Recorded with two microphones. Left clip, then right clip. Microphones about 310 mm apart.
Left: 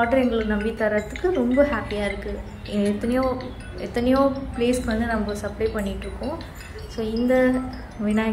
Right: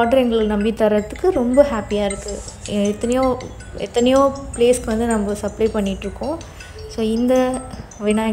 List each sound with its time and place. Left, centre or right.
0.0 s a woman's voice: right
7.0 s a woman's voice: right